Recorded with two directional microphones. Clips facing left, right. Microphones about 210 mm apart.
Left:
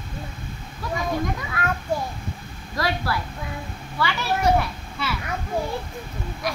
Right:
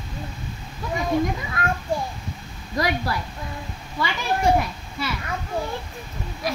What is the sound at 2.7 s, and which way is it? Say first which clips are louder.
Speech: right 1 dB; 20° right (ahead or behind).